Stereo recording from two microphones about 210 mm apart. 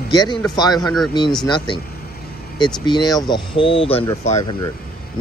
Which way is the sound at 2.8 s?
20° left (ahead or behind).